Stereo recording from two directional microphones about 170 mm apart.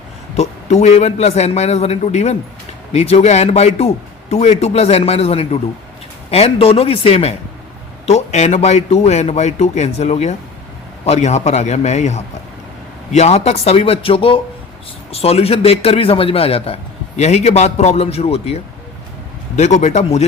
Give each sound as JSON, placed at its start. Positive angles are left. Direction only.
{"t": 0.3, "sound": "a man's voice", "side_deg": 40}